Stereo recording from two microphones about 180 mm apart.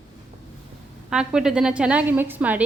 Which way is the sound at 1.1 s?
5° right (ahead or behind).